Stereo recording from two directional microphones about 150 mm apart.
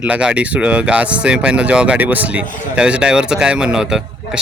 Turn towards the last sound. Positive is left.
turn(degrees=-5)  # may be behind; listen again after turning